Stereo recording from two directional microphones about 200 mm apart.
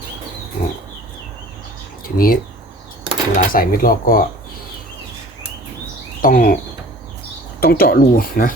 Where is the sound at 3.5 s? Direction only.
45° left (ahead or behind).